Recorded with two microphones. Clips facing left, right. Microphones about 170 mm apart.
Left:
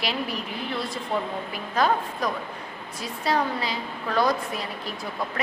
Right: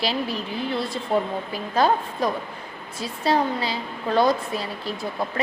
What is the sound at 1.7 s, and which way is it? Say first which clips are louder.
A woman's voice: right 3 dB; 30° right (ahead or behind).